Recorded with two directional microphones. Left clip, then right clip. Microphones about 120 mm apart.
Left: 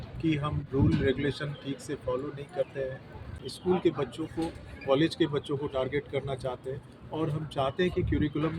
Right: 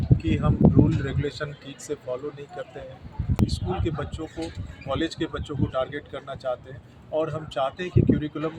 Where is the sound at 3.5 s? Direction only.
35° right (ahead or behind).